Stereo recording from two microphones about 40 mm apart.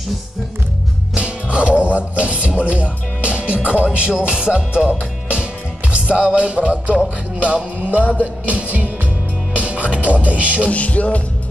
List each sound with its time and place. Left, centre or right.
1.1 s speech: right
4.2 s music: right
8.2 s music: right
10.7 s music: left